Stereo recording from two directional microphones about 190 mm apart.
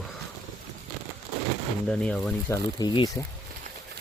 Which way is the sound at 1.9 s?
5° left (ahead or behind).